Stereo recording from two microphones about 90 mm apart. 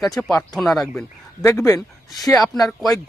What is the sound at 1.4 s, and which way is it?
Speech, 35° left (ahead or behind).